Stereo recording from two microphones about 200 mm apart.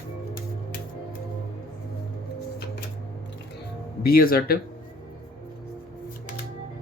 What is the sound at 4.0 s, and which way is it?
Speech, 50° left (ahead or behind).